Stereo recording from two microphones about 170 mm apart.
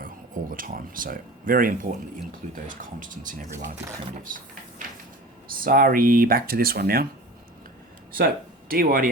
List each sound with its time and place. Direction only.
0.0 s speech: 55° right (ahead or behind)
5.6 s speech: 55° right (ahead or behind)
8.1 s speech: 60° right (ahead or behind)